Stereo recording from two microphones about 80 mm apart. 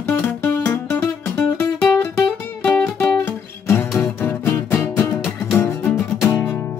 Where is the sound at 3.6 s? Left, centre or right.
Left.